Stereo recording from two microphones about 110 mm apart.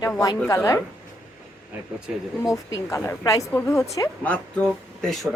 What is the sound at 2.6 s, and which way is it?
A woman's voice, 25° left (ahead or behind).